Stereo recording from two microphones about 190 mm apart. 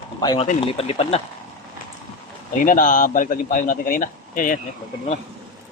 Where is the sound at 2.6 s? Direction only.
45° left (ahead or behind).